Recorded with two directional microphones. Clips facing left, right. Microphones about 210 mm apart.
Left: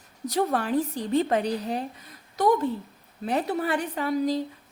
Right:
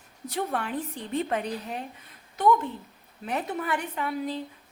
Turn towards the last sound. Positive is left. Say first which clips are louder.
# left 6 dB
turn(degrees=35)  # may be behind; listen again after turning